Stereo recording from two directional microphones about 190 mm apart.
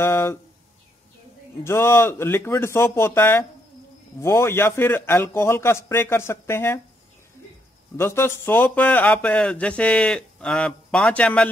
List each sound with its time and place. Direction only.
0.0 s a sound: 15° left (ahead or behind)
1.6 s speech: 15° left (ahead or behind)
8.0 s speech: 15° left (ahead or behind)